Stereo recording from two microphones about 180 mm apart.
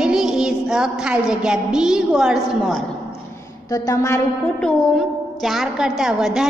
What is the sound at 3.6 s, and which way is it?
Speech, 20° left (ahead or behind).